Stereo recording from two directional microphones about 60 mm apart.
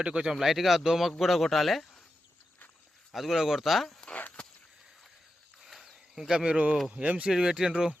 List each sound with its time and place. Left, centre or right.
0.0 s speech: centre
3.1 s speech: centre
4.4 s a sound: centre
5.6 s insect: centre
6.9 s speech: right
7.3 s speech: centre